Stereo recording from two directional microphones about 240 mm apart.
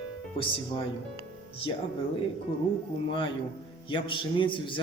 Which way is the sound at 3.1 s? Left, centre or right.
Left.